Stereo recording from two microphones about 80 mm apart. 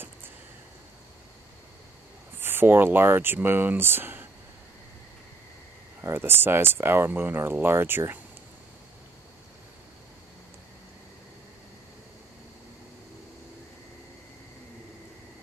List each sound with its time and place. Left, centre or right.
2.4 s speech: right
5.9 s speech: right